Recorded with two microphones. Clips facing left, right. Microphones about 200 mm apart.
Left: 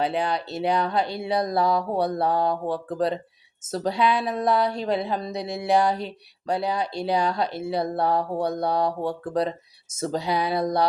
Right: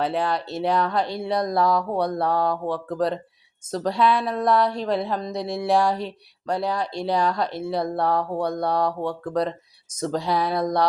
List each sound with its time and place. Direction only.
0.0 s speech: centre (ahead or behind)